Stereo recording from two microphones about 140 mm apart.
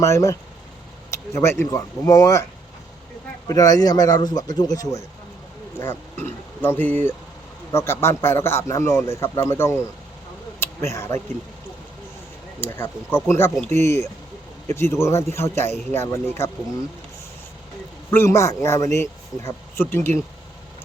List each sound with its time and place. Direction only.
0.0 s speech: 20° left (ahead or behind)
10.6 s a sound: 20° left (ahead or behind)
12.5 s speech: 15° left (ahead or behind)
18.1 s speech: 20° left (ahead or behind)